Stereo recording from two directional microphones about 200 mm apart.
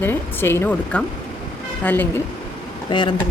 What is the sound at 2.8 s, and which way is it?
Speech, 25° left (ahead or behind).